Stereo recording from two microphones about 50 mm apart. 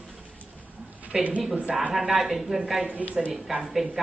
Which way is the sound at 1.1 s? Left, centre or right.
Centre.